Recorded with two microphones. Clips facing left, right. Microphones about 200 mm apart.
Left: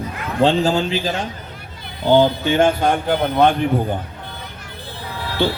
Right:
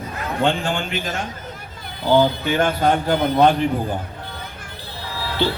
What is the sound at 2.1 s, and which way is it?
Speech, 25° left (ahead or behind).